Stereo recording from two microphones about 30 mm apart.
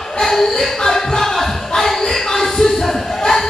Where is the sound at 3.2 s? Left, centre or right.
Centre.